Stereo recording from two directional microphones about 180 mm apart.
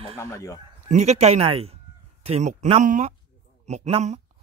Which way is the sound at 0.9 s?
40° right (ahead or behind).